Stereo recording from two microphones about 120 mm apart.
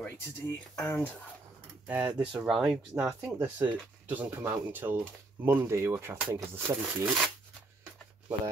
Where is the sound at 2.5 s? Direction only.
Centre (ahead or behind); by 7.1 s 20° right (ahead or behind).